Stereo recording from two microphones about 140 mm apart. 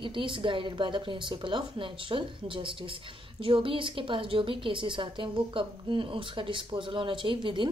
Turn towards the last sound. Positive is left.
turn(degrees=-35)  # may be behind; listen again after turning